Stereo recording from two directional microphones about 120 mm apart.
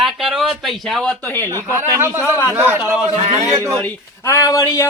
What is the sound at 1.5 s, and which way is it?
A man's voice, 20° right (ahead or behind).